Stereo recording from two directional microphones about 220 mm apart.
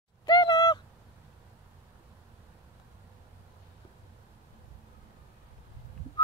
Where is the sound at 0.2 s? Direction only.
20° left (ahead or behind).